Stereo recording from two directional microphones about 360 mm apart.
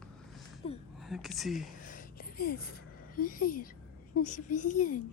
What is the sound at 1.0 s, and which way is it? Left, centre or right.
Speech, centre.